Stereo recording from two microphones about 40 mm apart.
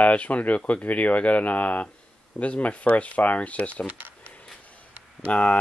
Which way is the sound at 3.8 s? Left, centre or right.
Right.